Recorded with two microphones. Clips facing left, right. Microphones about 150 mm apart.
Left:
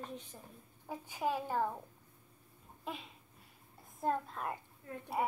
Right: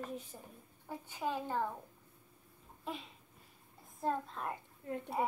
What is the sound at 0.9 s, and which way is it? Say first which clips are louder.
Speech: left 2 dB; 10° left (ahead or behind).